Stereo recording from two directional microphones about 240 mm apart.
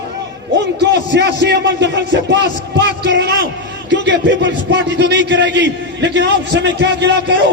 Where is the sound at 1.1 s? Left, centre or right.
Right.